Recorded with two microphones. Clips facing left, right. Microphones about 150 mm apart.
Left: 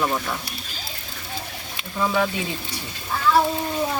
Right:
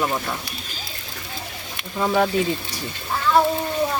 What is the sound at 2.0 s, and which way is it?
Speech, 40° right (ahead or behind).